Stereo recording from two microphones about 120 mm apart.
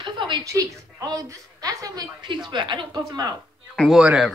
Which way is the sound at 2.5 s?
40° right (ahead or behind).